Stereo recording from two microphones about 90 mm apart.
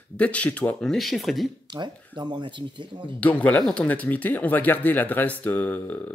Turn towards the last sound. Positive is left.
turn(degrees=20)  # may be behind; listen again after turning